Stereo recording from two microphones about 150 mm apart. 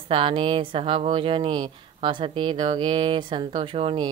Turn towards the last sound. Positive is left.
turn(degrees=-35)  # may be behind; listen again after turning